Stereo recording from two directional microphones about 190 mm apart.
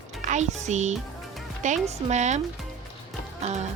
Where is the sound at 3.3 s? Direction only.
35° right (ahead or behind).